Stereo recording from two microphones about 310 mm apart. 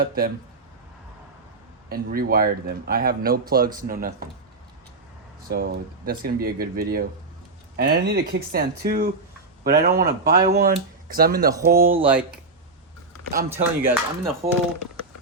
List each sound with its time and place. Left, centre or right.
0.0 s speech: right
1.9 s speech: right
5.5 s speech: right
12.0 s speech: centre
13.5 s speech: centre